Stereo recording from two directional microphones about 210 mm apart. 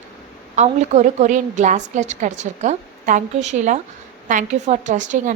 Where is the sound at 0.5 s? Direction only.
35° right (ahead or behind).